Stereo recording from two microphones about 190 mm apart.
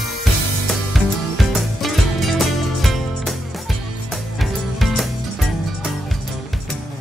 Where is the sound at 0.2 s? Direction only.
Centre (ahead or behind).